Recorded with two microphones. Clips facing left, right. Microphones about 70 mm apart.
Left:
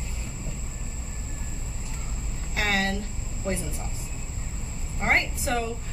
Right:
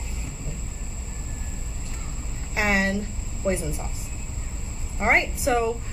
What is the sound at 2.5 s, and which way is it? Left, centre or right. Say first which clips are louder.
Speech: right 3 dB; centre.